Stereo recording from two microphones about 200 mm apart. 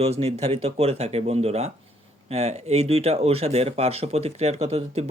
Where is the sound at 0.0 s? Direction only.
30° right (ahead or behind).